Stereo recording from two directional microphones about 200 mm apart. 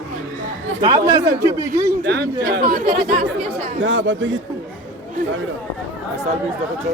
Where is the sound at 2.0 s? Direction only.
55° right (ahead or behind).